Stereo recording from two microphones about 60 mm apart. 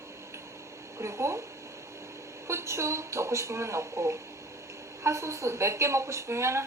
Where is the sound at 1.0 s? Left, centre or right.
Right.